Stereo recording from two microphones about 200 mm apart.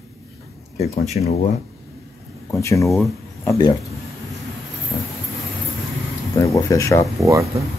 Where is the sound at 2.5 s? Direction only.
15° left (ahead or behind).